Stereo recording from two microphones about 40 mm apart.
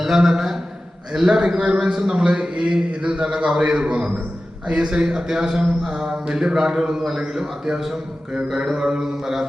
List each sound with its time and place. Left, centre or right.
0.0 s a man's voice: centre